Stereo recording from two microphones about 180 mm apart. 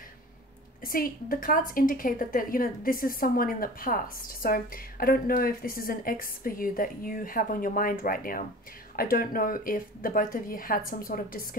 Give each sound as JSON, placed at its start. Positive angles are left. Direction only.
{"t": 0.8, "sound": "a woman's voice", "side_deg": 50}